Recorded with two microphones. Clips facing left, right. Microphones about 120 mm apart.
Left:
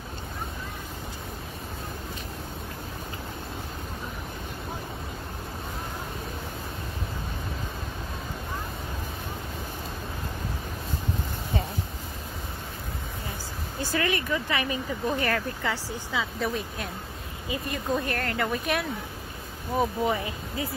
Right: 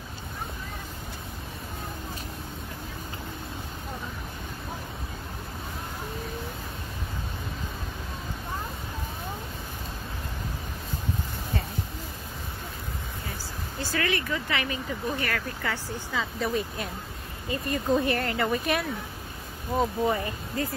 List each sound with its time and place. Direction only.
13.7 s speech: 20° left (ahead or behind)
15.6 s speech: 10° left (ahead or behind)